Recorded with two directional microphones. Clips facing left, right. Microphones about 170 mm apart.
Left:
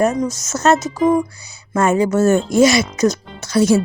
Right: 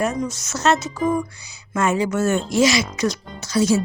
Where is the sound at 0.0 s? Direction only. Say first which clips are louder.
Left 6 dB; 40° left (ahead or behind).